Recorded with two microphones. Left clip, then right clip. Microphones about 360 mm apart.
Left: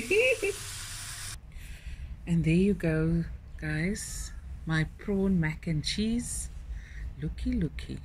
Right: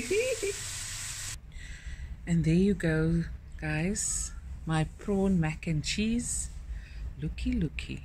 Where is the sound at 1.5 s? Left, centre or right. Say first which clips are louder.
Right 3 dB; centre.